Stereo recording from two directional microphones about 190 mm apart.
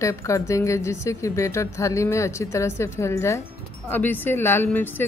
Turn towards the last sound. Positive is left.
turn(degrees=10)  # may be behind; listen again after turning